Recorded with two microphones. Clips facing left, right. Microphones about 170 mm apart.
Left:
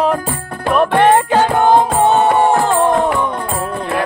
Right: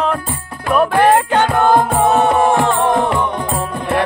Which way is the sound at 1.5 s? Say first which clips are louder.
Left 1 dB; 30° left (ahead or behind).